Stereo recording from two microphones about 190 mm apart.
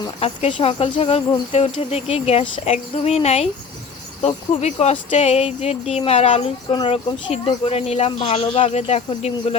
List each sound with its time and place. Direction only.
0.0 s speech: 30° left (ahead or behind)